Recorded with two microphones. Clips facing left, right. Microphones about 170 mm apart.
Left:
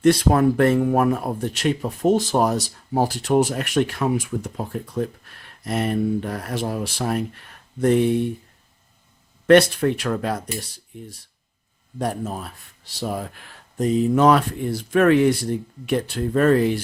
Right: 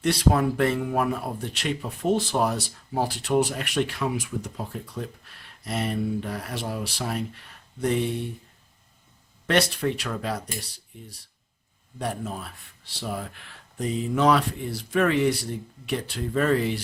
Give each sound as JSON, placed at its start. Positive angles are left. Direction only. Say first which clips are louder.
{"t": 0.0, "sound": "speech", "louder": "left 6 dB", "side_deg": 50}
{"t": 9.5, "sound": "speech", "louder": "left 9 dB", "side_deg": 55}
{"t": 11.9, "sound": "speech", "louder": "left 5 dB", "side_deg": 45}